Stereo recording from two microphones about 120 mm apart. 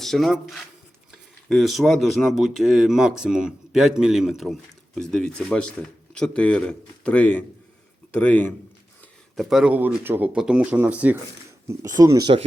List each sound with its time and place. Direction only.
0.0 s speech: 5° left (ahead or behind)
9.3 s speech: centre (ahead or behind)
11.9 s speech: 30° right (ahead or behind)